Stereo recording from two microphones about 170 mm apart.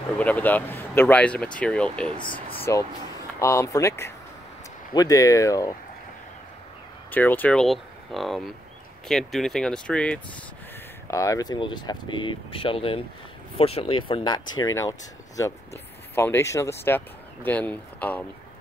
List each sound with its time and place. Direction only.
0.2 s speech: 10° left (ahead or behind)
7.1 s speech: 10° left (ahead or behind)
11.1 s speech: 20° left (ahead or behind)